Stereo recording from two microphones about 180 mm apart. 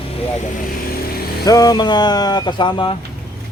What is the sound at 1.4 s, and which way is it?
Speech, 20° left (ahead or behind).